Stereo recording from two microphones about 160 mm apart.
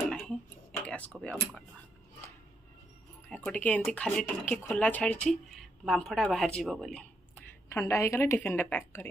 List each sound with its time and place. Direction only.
0.0 s a sound: 5° left (ahead or behind)
0.8 s speech: 10° left (ahead or behind)
3.3 s speech: 5° left (ahead or behind)
7.7 s speech: 20° left (ahead or behind)